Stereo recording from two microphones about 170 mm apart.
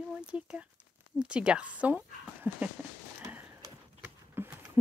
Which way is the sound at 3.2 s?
15° right (ahead or behind).